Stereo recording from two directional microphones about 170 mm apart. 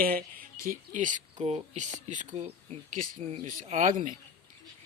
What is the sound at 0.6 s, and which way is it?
Speech, 50° right (ahead or behind).